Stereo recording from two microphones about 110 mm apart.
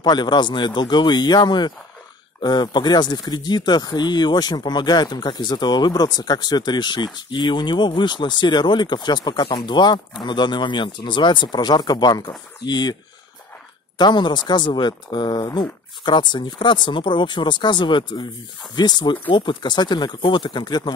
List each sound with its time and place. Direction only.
0.0 s speech: 40° left (ahead or behind)
13.9 s speech: 40° left (ahead or behind)